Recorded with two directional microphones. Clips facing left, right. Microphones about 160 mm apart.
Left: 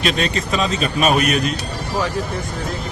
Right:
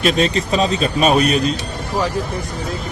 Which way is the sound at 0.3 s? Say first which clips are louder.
Right 3 dB; 35° right (ahead or behind).